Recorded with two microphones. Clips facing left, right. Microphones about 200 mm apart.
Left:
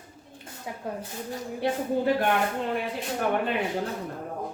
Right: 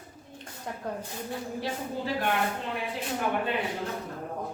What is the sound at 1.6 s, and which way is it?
Speech, 55° left (ahead or behind).